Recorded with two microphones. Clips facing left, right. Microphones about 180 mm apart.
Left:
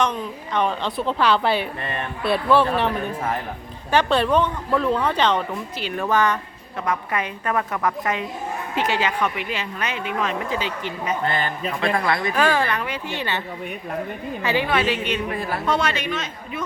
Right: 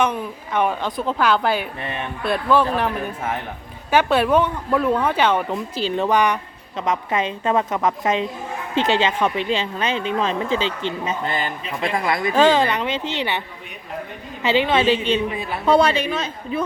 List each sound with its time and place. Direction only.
0.0 s speech: 10° right (ahead or behind)
3.9 s speech: 5° right (ahead or behind)
5.5 s speech: 25° right (ahead or behind)
6.1 s speech: 15° right (ahead or behind)
14.4 s a woman's voice: 20° right (ahead or behind)